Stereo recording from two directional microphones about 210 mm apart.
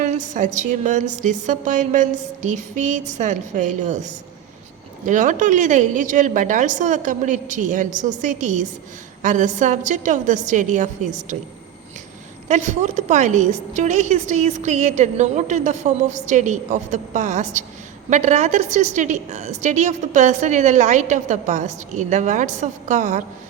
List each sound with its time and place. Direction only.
0.0 s a woman's voice: 35° right (ahead or behind)
12.5 s a woman's voice: 35° right (ahead or behind)